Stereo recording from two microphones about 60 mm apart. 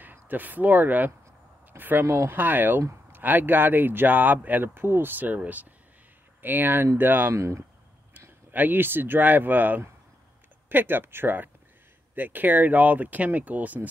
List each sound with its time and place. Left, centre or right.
0.0 s speech: right
2.0 s speech: right
7.3 s speech: right
8.5 s speech: right